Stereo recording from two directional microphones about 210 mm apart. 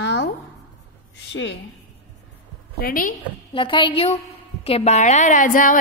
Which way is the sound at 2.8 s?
40° left (ahead or behind).